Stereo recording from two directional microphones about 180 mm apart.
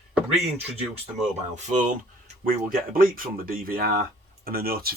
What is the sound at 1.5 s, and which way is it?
Speech, 45° right (ahead or behind).